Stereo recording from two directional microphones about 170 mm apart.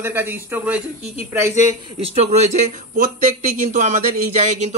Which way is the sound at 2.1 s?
40° right (ahead or behind).